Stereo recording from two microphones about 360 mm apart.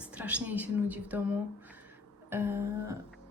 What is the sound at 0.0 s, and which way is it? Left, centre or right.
A woman's voice, centre.